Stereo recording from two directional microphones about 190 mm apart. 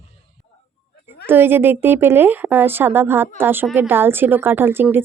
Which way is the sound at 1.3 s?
10° right (ahead or behind).